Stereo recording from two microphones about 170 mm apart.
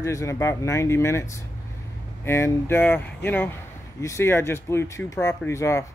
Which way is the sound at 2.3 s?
15° left (ahead or behind).